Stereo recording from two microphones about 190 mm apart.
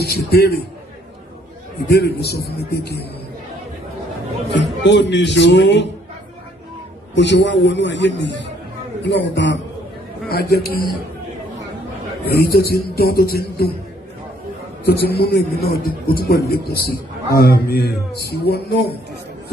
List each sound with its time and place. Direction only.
0.0 s a man's voice: 55° left (ahead or behind)
1.9 s a man's voice: 60° left (ahead or behind)
4.6 s a man's voice: 65° left (ahead or behind)
7.2 s a man's voice: 65° left (ahead or behind)
10.2 s a man's voice: 55° left (ahead or behind)
12.3 s a man's voice: 55° left (ahead or behind)
14.9 s a man's voice: 55° left (ahead or behind)